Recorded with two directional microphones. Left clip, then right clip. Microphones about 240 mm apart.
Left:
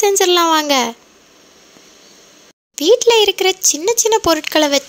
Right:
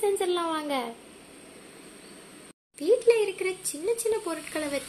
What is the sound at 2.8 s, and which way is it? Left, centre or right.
Speech, left.